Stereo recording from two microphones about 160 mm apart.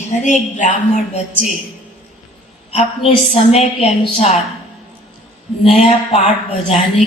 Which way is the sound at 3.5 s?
40° left (ahead or behind).